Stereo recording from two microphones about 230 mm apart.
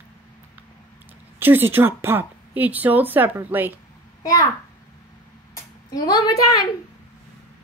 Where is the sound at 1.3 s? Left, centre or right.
Centre.